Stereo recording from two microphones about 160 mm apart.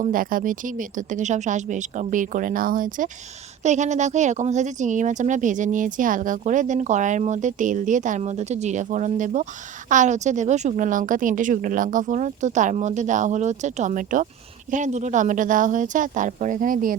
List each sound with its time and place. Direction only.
0.0 s speech: 60° right (ahead or behind)
3.6 s speech: 45° right (ahead or behind)